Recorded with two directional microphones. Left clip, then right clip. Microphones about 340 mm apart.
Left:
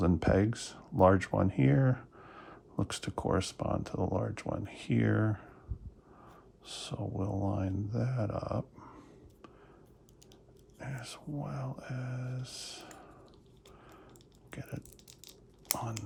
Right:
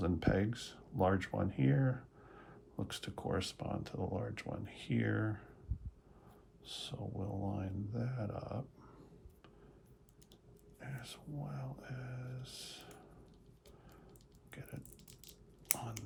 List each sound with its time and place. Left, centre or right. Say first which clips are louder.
0.0 s speech: left 7 dB; left
6.7 s speech: left 5 dB; left
10.8 s speech: left 6 dB; left
14.5 s speech: left 7 dB; left
15.2 s a sound: left 5 dB; centre